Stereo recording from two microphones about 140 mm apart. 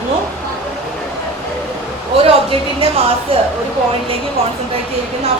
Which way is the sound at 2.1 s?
40° right (ahead or behind).